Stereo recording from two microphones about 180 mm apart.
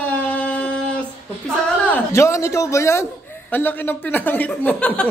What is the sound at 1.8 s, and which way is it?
Speech, 10° left (ahead or behind).